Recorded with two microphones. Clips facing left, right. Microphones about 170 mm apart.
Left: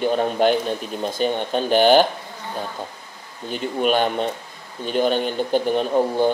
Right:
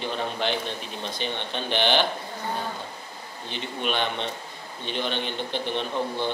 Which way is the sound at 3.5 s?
45° left (ahead or behind).